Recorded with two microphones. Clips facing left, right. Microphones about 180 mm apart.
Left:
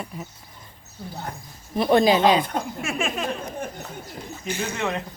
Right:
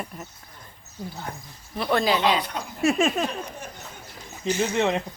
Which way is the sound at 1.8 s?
20° left (ahead or behind).